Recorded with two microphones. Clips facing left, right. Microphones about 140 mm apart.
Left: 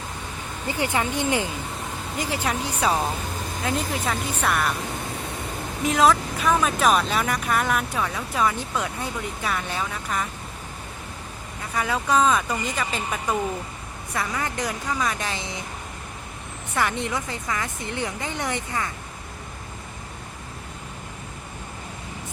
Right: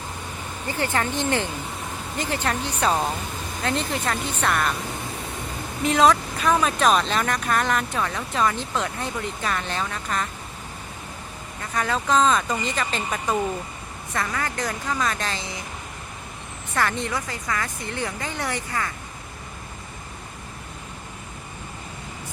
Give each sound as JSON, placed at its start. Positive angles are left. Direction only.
{"t": 0.7, "sound": "speech", "side_deg": 15}
{"t": 5.8, "sound": "speech", "side_deg": 0}
{"t": 11.7, "sound": "speech", "side_deg": 10}
{"t": 16.7, "sound": "a woman's voice", "side_deg": 15}